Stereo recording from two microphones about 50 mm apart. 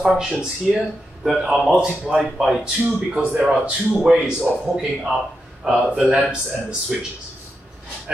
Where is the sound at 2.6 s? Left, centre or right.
Right.